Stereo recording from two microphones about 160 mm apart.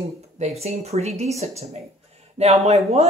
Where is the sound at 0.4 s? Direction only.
40° right (ahead or behind).